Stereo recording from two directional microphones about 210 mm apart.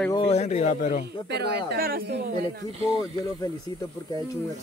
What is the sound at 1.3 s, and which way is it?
Speech, 50° right (ahead or behind).